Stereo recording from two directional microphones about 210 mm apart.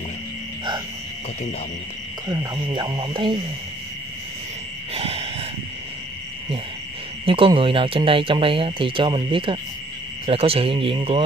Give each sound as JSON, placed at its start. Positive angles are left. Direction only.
{"t": 2.2, "sound": "speech", "side_deg": -15}
{"t": 4.9, "sound": "a sound", "side_deg": -30}
{"t": 7.2, "sound": "speech", "side_deg": -25}